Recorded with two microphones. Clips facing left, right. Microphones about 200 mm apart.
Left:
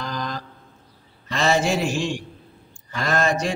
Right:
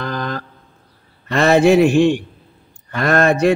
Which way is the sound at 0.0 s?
60° right (ahead or behind).